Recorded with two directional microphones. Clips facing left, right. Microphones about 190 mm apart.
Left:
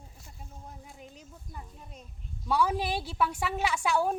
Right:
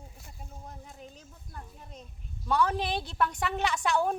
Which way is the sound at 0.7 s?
10° left (ahead or behind).